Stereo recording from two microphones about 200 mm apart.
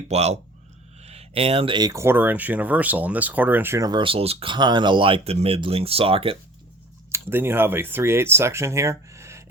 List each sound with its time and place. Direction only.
0.1 s speech: 35° right (ahead or behind)
7.1 s speech: 10° right (ahead or behind)